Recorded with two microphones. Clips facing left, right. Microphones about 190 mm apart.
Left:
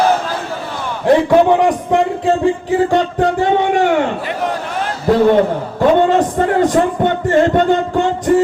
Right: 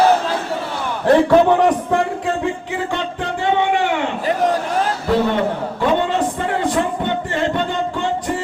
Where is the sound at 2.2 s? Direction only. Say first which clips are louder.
Left 7 dB; 35° left (ahead or behind).